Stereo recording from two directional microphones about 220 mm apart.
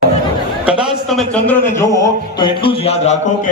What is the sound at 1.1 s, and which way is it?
A man's voice, 5° left (ahead or behind).